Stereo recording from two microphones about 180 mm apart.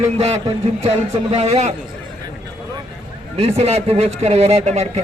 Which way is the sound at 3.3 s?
35° right (ahead or behind).